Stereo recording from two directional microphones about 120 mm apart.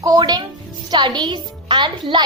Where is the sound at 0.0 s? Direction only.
30° right (ahead or behind).